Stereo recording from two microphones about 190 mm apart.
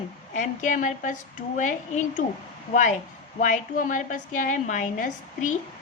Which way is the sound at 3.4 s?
40° left (ahead or behind).